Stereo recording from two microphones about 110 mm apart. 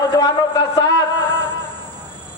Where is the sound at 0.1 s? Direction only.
40° left (ahead or behind).